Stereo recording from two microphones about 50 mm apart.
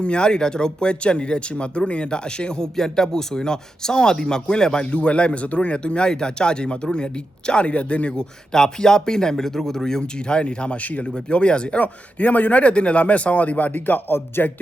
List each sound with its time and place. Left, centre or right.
0.0 s speech: centre
8.1 s speech: centre; by 14.5 s left